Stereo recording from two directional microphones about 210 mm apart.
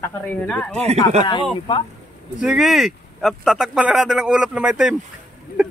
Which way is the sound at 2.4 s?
Centre (ahead or behind).